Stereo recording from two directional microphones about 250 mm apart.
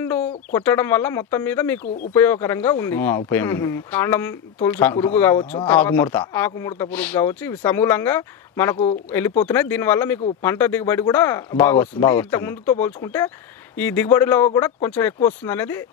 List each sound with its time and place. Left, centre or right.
0.0 s bird: centre
0.5 s speech: centre
5.4 s speech: left
5.7 s speech: centre